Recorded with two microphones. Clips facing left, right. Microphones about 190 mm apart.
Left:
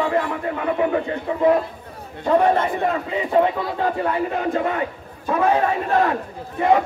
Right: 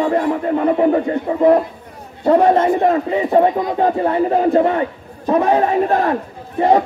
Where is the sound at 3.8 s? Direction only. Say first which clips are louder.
Right 6 dB; 35° right (ahead or behind).